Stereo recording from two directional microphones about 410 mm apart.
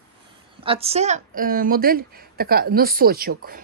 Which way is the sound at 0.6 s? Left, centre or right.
Centre.